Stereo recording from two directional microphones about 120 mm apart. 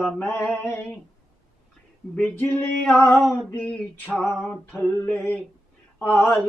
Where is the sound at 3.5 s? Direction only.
10° left (ahead or behind).